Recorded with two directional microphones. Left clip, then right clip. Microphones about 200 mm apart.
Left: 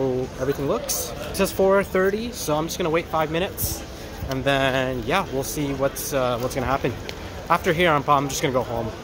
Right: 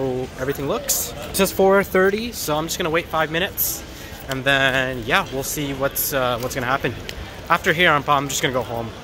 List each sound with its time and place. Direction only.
0.7 s a man's voice: centre (ahead or behind)
1.3 s speech: 35° right (ahead or behind)
2.4 s a man's voice: centre (ahead or behind)